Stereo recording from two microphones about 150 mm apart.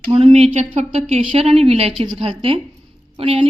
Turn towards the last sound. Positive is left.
turn(degrees=-35)  # may be behind; listen again after turning